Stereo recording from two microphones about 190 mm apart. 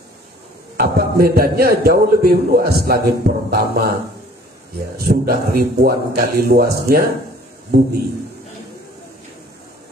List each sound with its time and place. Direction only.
0.7 s a man's voice: 55° right (ahead or behind)
4.9 s a man's voice: 55° right (ahead or behind)